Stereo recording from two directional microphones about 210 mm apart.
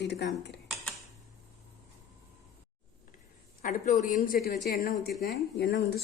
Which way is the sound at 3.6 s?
35° left (ahead or behind).